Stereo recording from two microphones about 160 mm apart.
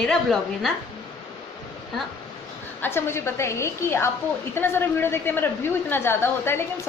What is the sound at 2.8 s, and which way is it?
A woman's voice, 15° left (ahead or behind).